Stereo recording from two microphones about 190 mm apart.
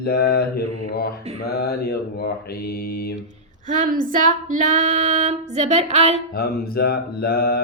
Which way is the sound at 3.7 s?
45° right (ahead or behind).